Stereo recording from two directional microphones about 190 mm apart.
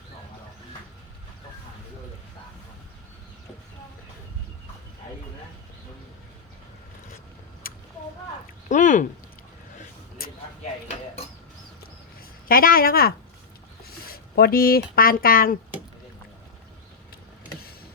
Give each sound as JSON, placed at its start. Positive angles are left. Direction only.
{"t": 7.6, "sound": "a sound", "side_deg": 50}
{"t": 8.7, "sound": "speech", "side_deg": 40}
{"t": 10.8, "sound": "dishes", "side_deg": 30}
{"t": 12.5, "sound": "a woman's voice", "side_deg": 50}